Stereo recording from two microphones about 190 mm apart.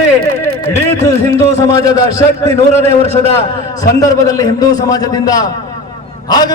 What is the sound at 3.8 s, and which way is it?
A man's voice, 20° left (ahead or behind).